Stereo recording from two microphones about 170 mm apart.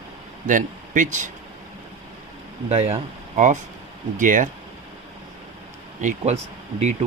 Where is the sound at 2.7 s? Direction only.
40° right (ahead or behind).